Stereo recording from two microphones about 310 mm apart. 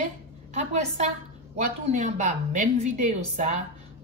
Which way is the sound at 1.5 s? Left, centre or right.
Right.